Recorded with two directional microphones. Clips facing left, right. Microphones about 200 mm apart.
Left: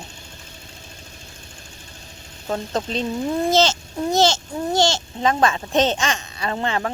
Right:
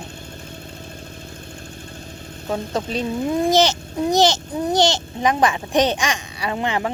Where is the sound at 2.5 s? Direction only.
10° right (ahead or behind).